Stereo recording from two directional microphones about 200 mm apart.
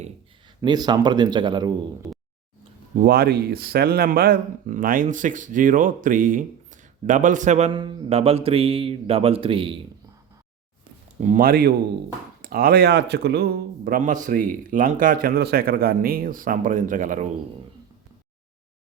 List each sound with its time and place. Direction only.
0.6 s speech: 20° right (ahead or behind)
3.0 s a man's voice: 50° right (ahead or behind)
7.7 s speech: 25° right (ahead or behind)
11.2 s a man's voice: 40° right (ahead or behind)